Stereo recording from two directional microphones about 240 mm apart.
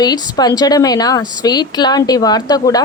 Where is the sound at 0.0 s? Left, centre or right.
Centre.